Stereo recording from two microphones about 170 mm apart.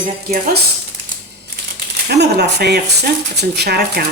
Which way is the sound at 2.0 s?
75° right (ahead or behind).